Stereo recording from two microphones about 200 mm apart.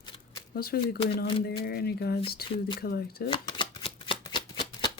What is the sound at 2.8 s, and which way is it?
Speech, 50° left (ahead or behind).